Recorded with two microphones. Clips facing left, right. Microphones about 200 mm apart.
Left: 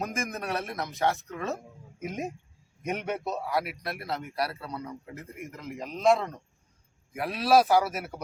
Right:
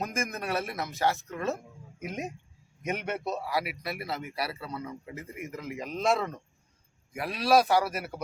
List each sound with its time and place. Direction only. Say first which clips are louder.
0.0 s a man's voice: even; centre (ahead or behind)